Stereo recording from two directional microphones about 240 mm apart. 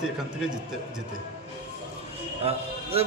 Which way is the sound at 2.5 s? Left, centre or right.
Right.